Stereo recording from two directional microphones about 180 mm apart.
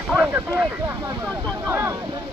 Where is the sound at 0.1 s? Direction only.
10° right (ahead or behind).